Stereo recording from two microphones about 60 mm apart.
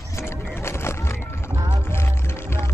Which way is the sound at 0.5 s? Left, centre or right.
Left.